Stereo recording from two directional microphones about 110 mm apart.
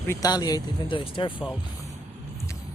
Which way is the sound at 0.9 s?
50° left (ahead or behind).